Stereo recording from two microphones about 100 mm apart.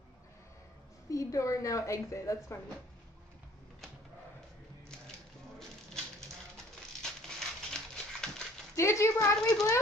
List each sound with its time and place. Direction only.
1.1 s a woman's voice: 30° left (ahead or behind)
7.0 s dog: 5° left (ahead or behind)
8.7 s speech: 30° left (ahead or behind)